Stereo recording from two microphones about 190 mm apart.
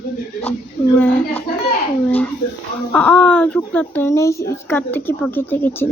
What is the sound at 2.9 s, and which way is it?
Speech, 5° left (ahead or behind).